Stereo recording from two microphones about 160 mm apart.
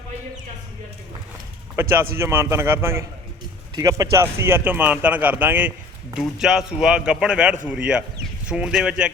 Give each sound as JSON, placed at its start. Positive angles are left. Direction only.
{"t": 1.8, "sound": "speech", "side_deg": -15}